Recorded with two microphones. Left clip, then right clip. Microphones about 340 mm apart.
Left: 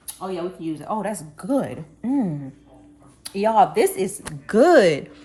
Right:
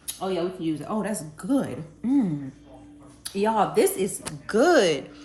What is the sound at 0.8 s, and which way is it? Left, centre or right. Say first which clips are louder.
A woman's voice: left 3 dB; centre.